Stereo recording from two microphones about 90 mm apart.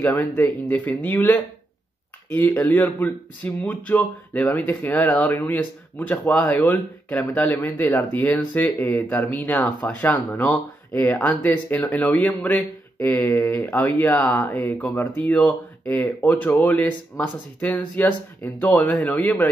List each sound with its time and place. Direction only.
0.2 s speech: 20° left (ahead or behind)
2.6 s speech: 20° left (ahead or behind)